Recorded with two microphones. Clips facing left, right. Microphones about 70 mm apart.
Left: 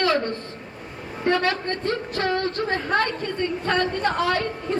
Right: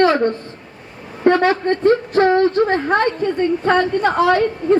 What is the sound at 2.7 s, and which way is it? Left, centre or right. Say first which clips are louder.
A woman's voice: right 6 dB; right.